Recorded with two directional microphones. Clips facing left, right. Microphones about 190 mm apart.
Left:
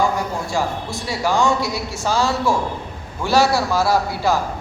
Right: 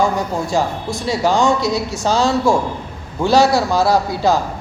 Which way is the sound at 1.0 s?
20° right (ahead or behind).